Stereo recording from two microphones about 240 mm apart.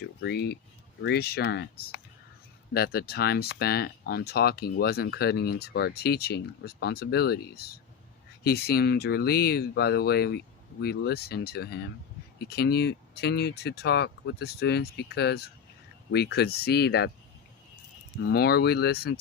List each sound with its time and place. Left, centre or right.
0.0 s speech: left
18.3 s speech: left